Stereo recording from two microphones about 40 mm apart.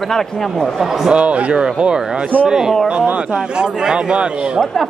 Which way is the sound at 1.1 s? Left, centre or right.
Right.